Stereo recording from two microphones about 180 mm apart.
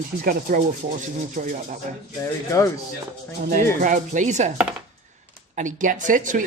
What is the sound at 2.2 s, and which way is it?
Speech, 20° left (ahead or behind).